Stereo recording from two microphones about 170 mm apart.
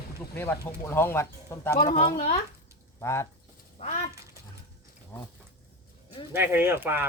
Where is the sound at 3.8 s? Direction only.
40° left (ahead or behind).